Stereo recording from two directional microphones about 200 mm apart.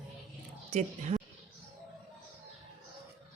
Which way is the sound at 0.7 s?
35° right (ahead or behind).